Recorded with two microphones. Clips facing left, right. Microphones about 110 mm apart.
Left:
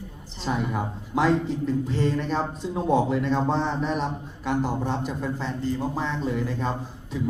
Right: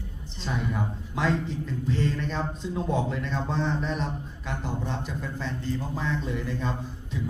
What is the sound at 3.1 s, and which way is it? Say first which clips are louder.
Speech: left 7 dB; 15° left (ahead or behind).